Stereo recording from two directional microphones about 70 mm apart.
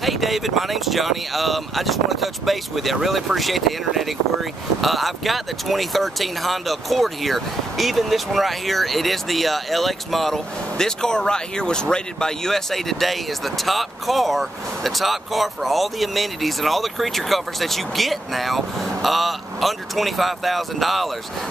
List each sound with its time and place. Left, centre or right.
0.0 s speech: centre